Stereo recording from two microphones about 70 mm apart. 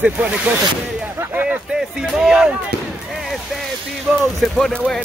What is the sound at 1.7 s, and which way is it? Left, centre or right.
Speech, centre.